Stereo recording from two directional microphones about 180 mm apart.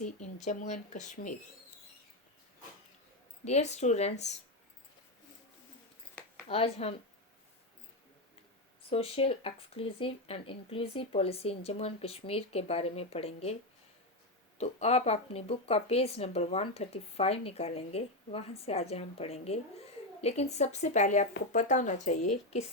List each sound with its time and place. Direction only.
0.0 s speech: 40° left (ahead or behind)
3.4 s speech: 35° left (ahead or behind)
6.5 s speech: 35° left (ahead or behind)
8.9 s speech: 30° left (ahead or behind)
14.6 s speech: 35° left (ahead or behind)